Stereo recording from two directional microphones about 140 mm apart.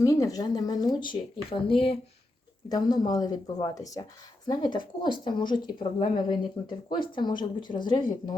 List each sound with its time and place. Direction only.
0.0 s a woman's voice: 25° left (ahead or behind); by 2.0 s 40° left (ahead or behind)
2.6 s a woman's voice: 30° left (ahead or behind)